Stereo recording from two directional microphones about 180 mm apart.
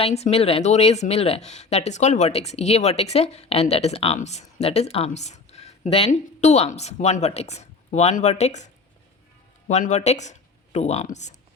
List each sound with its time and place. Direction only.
0.0 s speech: 35° left (ahead or behind)